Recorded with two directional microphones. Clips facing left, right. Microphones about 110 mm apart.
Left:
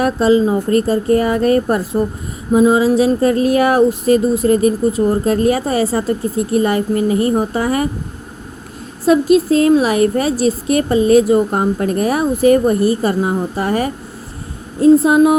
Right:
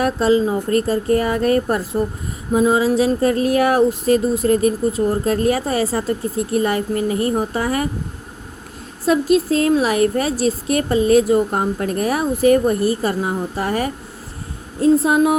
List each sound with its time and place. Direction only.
0.0 s a woman's voice: 15° left (ahead or behind)
2.5 s a woman's voice: 15° left (ahead or behind)
9.0 s a woman's voice: 15° left (ahead or behind)